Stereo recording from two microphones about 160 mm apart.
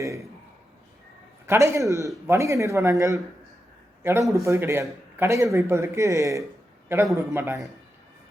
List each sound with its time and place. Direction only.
1.5 s a man's voice: 20° right (ahead or behind)